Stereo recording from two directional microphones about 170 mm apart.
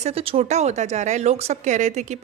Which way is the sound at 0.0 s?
35° right (ahead or behind).